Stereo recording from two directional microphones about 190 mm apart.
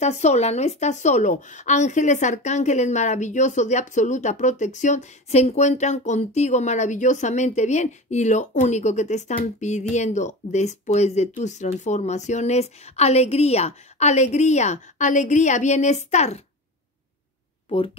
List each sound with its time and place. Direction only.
0.0 s speech: 35° left (ahead or behind)
17.6 s speech: 30° left (ahead or behind)